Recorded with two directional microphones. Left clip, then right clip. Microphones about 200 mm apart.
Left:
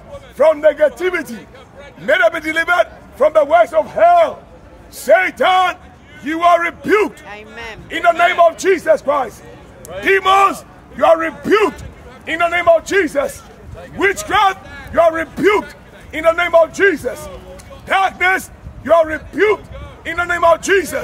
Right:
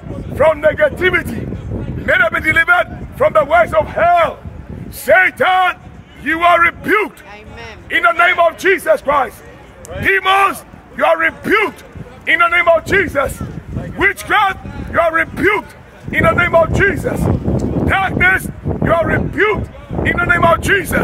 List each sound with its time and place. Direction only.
0.4 s a man's voice: 5° right (ahead or behind)
7.2 s speech: 35° left (ahead or behind)
7.9 s a man's voice: 5° right (ahead or behind)